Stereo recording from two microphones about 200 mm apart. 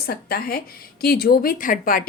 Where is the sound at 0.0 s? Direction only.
50° left (ahead or behind).